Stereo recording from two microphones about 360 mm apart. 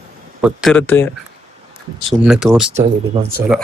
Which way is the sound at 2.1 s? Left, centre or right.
Centre.